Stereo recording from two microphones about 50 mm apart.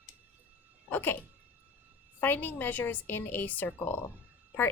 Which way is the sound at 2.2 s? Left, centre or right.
Left.